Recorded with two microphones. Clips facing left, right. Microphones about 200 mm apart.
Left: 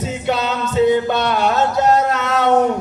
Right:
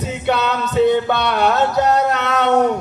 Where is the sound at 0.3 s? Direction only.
60° right (ahead or behind).